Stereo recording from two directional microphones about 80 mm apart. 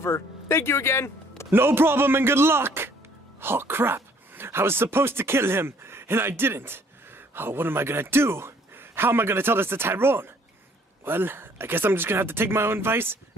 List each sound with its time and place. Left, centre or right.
0.0 s speech: left
1.5 s a man's voice: right